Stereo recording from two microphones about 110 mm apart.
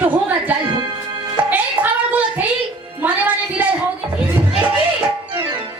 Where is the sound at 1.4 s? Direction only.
15° right (ahead or behind).